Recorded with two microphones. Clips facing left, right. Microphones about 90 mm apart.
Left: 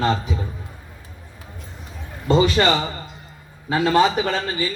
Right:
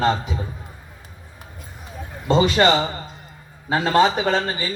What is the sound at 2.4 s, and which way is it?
A man's voice, 25° right (ahead or behind).